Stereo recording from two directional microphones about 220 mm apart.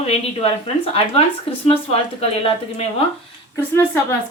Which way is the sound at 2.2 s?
25° left (ahead or behind).